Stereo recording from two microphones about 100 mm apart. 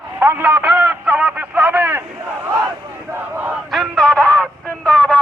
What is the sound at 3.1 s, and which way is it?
Battle cry, 20° right (ahead or behind).